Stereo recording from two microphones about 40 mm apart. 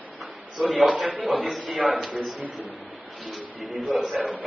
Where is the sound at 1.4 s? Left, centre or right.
Centre.